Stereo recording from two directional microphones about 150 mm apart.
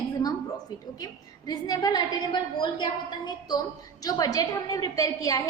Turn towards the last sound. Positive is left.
turn(degrees=20)  # may be behind; listen again after turning